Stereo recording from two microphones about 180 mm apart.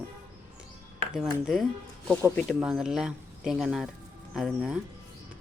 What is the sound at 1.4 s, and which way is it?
A woman's voice, centre (ahead or behind).